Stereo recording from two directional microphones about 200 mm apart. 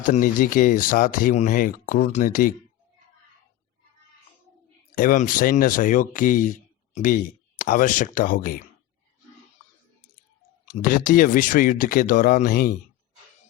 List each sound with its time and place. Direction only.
0.0 s speech: 45° left (ahead or behind)
4.9 s speech: 45° left (ahead or behind)
10.7 s speech: 45° left (ahead or behind)